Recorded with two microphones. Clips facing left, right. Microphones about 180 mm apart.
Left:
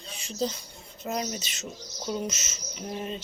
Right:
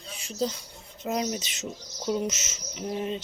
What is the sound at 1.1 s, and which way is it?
Speech, 15° right (ahead or behind).